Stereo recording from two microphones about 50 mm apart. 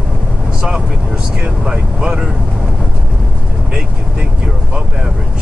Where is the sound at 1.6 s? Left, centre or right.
Centre.